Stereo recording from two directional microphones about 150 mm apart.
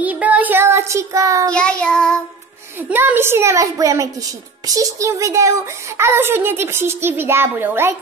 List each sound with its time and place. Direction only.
0.0 s child singing: 10° right (ahead or behind)
1.5 s child singing: 5° left (ahead or behind)
2.9 s a child's voice: 15° right (ahead or behind)